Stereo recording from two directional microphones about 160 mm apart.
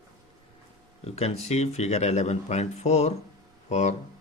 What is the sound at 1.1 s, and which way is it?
Speech, 40° left (ahead or behind).